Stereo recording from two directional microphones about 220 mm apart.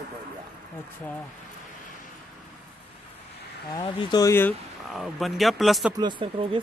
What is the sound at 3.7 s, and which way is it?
Speech, 15° left (ahead or behind).